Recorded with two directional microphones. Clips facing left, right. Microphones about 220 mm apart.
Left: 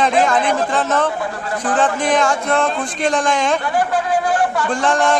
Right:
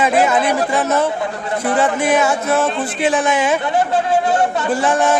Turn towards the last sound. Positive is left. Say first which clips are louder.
# right 1 dB
turn(degrees=-5)  # may be behind; listen again after turning